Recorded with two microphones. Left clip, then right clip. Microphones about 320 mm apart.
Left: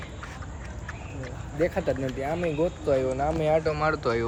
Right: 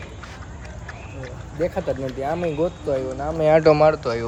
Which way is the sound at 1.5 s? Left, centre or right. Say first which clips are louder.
Right 2 dB; centre.